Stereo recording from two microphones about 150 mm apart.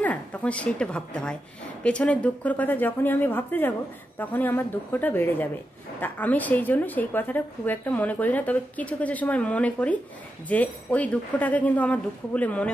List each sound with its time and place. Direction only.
0.0 s a woman's voice: 10° left (ahead or behind)